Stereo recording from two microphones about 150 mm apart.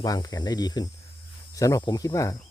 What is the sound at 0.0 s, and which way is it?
Speech, 25° left (ahead or behind).